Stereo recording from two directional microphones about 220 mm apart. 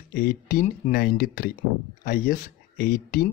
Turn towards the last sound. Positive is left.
turn(degrees=40)  # may be behind; listen again after turning